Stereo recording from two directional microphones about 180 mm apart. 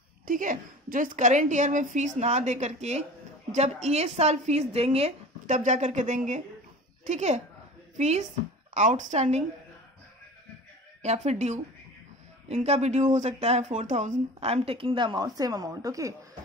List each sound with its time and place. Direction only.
0.2 s a woman's voice: 45° right (ahead or behind)
8.7 s speech: 45° right (ahead or behind)
11.0 s speech: 40° right (ahead or behind); by 16.2 s 20° right (ahead or behind)